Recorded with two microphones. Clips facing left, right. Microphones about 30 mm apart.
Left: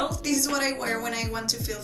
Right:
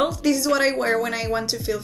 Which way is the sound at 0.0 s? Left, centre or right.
Centre.